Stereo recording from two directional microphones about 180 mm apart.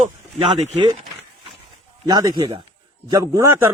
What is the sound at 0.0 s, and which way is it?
Speech, 40° right (ahead or behind).